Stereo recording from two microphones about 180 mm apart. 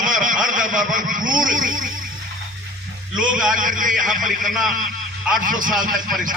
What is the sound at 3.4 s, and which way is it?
A man's voice, 45° right (ahead or behind).